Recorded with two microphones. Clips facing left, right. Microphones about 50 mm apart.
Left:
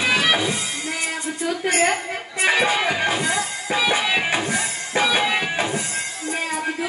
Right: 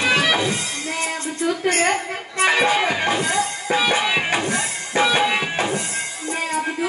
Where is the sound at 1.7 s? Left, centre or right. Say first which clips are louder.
Left 2 dB; centre.